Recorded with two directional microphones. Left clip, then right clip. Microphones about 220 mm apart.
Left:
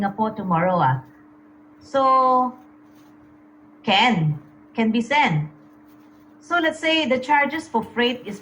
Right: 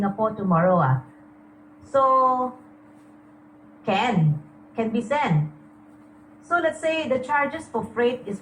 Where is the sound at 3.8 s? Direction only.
25° left (ahead or behind).